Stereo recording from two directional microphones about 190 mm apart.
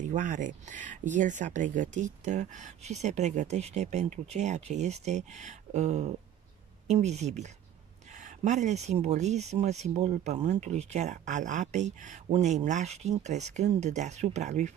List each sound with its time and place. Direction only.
0.0 s speech: 40° right (ahead or behind)